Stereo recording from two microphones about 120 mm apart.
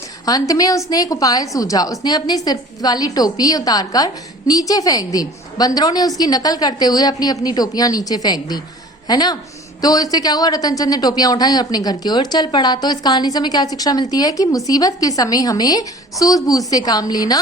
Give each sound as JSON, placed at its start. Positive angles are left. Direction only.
{"t": 0.3, "sound": "speech", "side_deg": 30}